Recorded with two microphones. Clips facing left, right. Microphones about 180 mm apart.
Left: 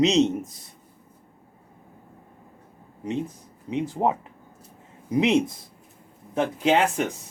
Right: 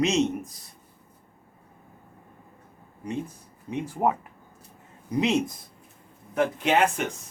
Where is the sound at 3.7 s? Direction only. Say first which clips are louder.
Left 2 dB; 20° left (ahead or behind).